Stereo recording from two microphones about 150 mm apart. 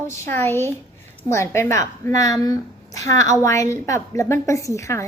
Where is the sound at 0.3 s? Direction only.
15° left (ahead or behind).